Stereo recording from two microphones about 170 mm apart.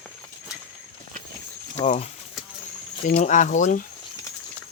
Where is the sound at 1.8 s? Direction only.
40° left (ahead or behind).